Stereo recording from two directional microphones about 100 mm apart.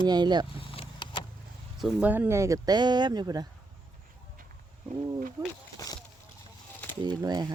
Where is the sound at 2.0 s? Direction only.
20° right (ahead or behind).